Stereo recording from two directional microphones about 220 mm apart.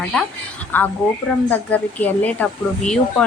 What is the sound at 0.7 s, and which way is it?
Speech, 10° left (ahead or behind).